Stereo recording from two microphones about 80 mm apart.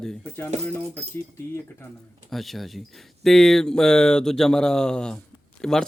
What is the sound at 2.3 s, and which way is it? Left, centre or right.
Speech, centre.